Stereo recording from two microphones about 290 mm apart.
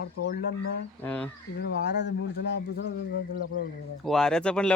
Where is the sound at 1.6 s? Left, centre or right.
Left.